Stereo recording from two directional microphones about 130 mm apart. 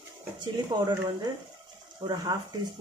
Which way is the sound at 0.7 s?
30° right (ahead or behind).